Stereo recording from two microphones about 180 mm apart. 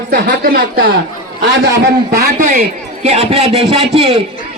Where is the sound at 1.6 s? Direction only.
75° right (ahead or behind).